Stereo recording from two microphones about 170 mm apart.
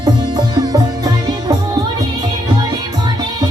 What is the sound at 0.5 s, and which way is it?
Music, 25° right (ahead or behind).